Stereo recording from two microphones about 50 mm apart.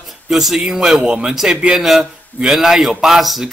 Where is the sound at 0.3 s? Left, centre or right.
Centre.